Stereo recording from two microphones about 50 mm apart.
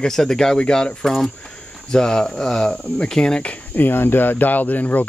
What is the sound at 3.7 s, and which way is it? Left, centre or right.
Speech, left.